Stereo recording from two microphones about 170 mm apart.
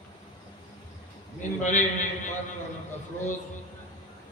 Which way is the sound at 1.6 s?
45° left (ahead or behind).